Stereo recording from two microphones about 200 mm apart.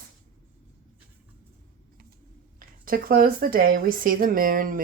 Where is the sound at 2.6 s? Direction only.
45° right (ahead or behind).